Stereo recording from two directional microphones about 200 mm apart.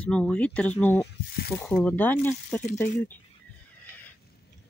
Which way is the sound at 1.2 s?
50° left (ahead or behind).